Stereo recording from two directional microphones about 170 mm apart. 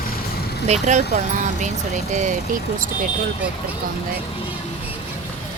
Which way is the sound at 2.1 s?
45° right (ahead or behind).